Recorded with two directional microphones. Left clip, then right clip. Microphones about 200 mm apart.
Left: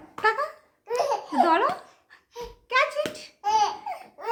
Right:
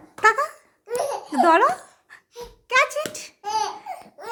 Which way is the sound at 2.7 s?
60° right (ahead or behind).